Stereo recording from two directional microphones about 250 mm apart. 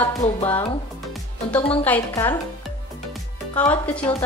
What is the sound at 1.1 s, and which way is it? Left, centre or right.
Music, centre.